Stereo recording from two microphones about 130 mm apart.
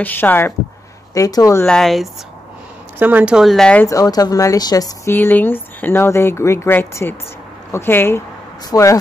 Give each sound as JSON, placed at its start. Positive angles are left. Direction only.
{"t": 0.0, "sound": "speech", "side_deg": 15}
{"t": 1.7, "sound": "speech", "side_deg": 0}
{"t": 3.0, "sound": "speech", "side_deg": -15}
{"t": 3.8, "sound": "speech", "side_deg": 25}
{"t": 5.1, "sound": "speech", "side_deg": 15}